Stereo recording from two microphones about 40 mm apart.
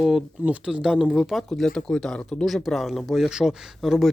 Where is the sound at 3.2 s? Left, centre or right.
Centre.